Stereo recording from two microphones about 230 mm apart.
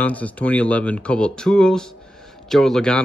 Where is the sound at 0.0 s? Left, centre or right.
Centre.